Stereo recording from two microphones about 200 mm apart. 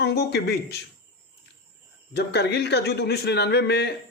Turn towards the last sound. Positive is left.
turn(degrees=55)  # may be behind; listen again after turning